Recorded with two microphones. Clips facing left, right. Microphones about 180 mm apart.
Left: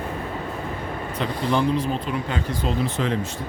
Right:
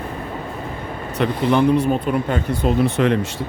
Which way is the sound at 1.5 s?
65° right (ahead or behind).